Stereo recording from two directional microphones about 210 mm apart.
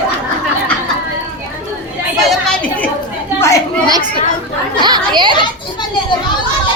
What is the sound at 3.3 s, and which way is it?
Chatter, 15° left (ahead or behind).